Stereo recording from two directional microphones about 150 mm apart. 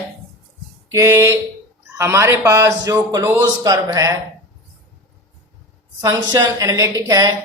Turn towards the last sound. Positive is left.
turn(degrees=-25)  # may be behind; listen again after turning